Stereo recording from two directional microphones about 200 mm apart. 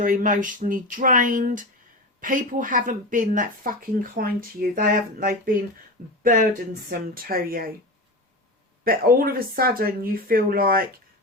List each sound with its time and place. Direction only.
0.0 s speech: 45° right (ahead or behind)
8.8 s speech: 45° right (ahead or behind)